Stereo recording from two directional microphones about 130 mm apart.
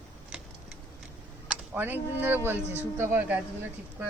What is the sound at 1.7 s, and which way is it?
Speech, 15° right (ahead or behind).